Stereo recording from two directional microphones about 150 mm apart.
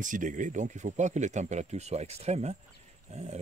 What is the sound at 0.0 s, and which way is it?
Speech, 60° right (ahead or behind).